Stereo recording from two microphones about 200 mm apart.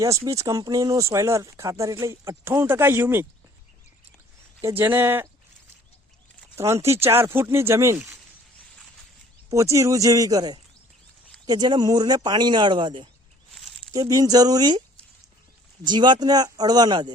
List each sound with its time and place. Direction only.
0.0 s speech: 15° right (ahead or behind)
4.8 s speech: 10° right (ahead or behind)
6.6 s speech: 15° right (ahead or behind)
9.5 s speech: 15° right (ahead or behind)
15.9 s speech: 25° right (ahead or behind)